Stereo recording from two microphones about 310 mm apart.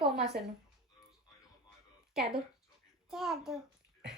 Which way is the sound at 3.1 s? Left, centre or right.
Centre.